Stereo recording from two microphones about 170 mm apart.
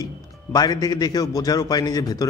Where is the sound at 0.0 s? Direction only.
25° left (ahead or behind).